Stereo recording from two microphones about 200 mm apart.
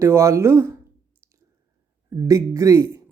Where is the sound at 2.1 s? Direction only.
15° right (ahead or behind).